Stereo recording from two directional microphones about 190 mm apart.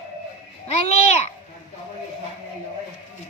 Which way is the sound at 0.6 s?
35° left (ahead or behind).